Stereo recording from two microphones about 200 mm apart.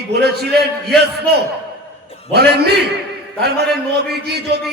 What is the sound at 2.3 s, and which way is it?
A man's voice, 55° right (ahead or behind).